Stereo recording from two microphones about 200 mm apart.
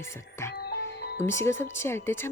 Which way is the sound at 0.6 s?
50° left (ahead or behind).